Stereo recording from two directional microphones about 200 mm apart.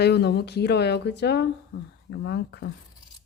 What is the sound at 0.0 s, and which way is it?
Speech, 55° left (ahead or behind).